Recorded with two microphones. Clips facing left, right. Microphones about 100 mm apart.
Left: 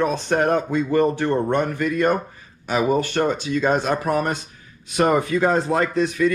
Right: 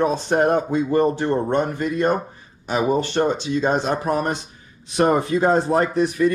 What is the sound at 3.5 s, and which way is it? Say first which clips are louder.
Speech: left 2 dB; 25° right (ahead or behind).